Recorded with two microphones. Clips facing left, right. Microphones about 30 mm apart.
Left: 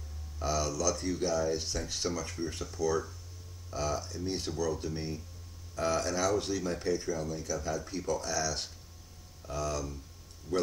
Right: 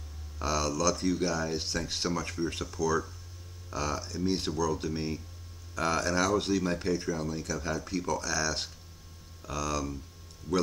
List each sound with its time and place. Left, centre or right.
0.4 s speech: right
0.9 s speech: right
3.7 s speech: right
4.2 s speech: right
6.3 s speech: right
9.5 s speech: right